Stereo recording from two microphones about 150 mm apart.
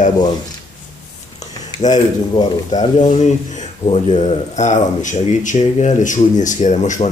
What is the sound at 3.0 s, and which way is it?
Speech, 55° left (ahead or behind).